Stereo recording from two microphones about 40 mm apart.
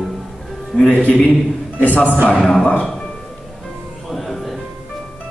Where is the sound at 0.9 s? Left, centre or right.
Left.